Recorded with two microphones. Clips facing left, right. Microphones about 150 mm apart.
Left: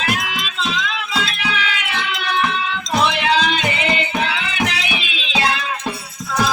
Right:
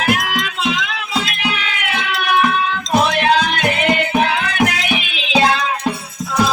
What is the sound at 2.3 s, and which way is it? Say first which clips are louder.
Music: right 5 dB; 55° right (ahead or behind).